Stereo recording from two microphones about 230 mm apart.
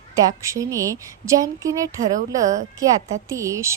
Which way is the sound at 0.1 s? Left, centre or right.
Centre.